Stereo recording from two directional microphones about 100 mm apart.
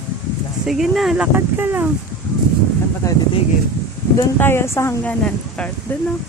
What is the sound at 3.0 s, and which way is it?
Speech, 30° left (ahead or behind).